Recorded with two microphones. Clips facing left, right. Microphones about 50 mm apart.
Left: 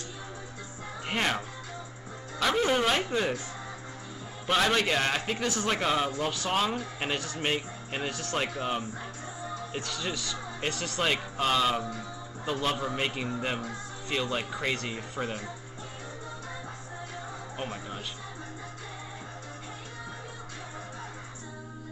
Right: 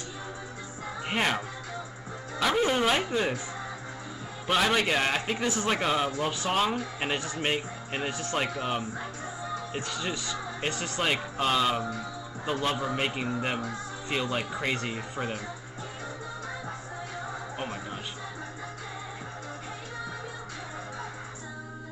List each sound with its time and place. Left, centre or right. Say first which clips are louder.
1.0 s speech: right 1 dB; centre
4.5 s speech: right 1 dB; centre